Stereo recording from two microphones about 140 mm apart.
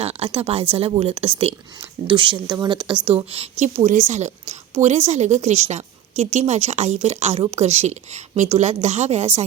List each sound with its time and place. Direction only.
0.0 s a woman's voice: 45° right (ahead or behind)
3.2 s a woman's voice: 45° right (ahead or behind)